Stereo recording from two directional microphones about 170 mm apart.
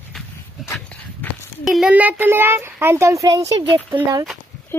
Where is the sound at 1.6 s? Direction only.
Centre (ahead or behind); by 3.4 s 20° right (ahead or behind).